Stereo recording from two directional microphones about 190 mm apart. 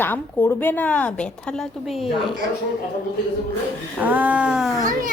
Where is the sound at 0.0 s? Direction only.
10° left (ahead or behind).